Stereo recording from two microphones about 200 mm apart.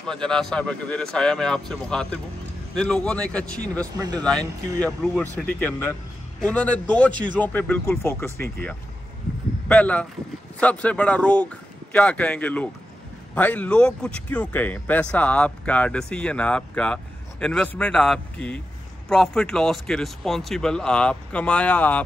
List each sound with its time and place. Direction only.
0.0 s speech: 5° left (ahead or behind)
4.4 s speech: 15° right (ahead or behind)
4.8 s speech: 5° left (ahead or behind)